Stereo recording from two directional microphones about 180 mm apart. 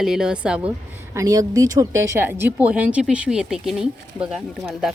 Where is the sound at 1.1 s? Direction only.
20° right (ahead or behind).